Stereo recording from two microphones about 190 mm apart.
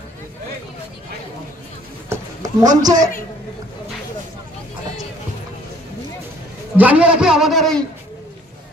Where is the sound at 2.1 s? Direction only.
20° right (ahead or behind).